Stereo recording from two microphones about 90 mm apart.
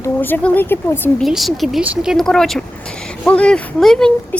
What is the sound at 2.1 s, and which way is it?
A woman's voice, 5° left (ahead or behind).